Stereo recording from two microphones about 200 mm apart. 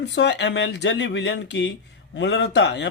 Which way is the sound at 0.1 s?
60° left (ahead or behind).